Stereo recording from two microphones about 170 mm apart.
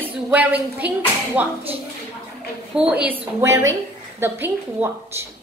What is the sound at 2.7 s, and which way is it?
Speech, 5° right (ahead or behind).